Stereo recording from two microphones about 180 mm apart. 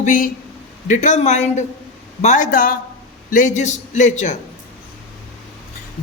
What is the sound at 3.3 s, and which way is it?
A man's voice, 45° left (ahead or behind).